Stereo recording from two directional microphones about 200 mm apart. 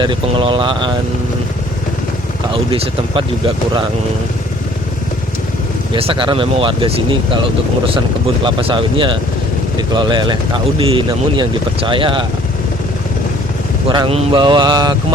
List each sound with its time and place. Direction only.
0.0 s speech: 25° right (ahead or behind)
2.6 s speech: 30° right (ahead or behind)
5.9 s speech: 25° right (ahead or behind)
8.4 s speech: 25° right (ahead or behind)
13.8 s speech: 25° right (ahead or behind)